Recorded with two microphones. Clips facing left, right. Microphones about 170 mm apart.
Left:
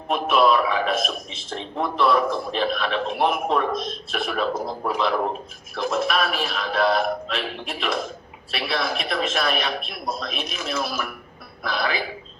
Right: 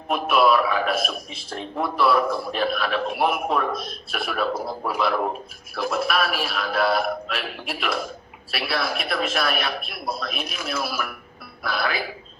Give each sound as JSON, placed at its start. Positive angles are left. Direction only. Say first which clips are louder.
{"t": 0.1, "sound": "a man's voice", "louder": "even", "side_deg": -5}